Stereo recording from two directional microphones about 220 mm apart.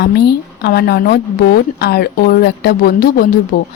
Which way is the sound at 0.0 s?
50° left (ahead or behind).